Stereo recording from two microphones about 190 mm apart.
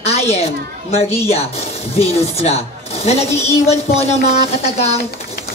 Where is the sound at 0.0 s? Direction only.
35° left (ahead or behind).